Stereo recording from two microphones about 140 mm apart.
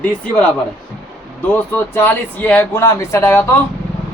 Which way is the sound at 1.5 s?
15° left (ahead or behind).